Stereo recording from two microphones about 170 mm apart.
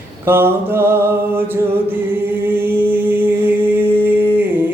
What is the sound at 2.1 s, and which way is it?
A capella, 15° right (ahead or behind).